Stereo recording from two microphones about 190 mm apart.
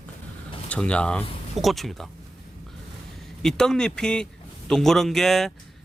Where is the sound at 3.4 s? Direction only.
5° left (ahead or behind).